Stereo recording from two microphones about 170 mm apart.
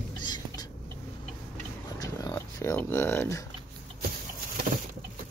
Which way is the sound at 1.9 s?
20° left (ahead or behind).